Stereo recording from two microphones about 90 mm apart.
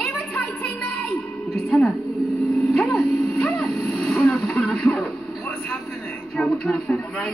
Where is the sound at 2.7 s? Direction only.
5° left (ahead or behind).